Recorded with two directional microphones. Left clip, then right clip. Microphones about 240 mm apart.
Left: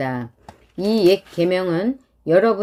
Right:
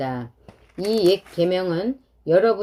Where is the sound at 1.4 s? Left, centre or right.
Left.